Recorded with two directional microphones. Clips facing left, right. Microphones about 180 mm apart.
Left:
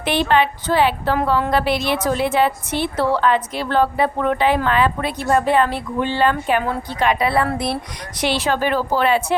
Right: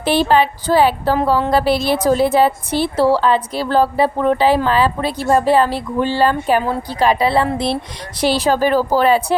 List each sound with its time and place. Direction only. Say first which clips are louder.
0.0 s a woman's voice: right 3 dB; 35° right (ahead or behind)